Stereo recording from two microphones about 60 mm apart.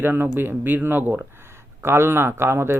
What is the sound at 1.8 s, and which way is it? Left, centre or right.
Speech, right.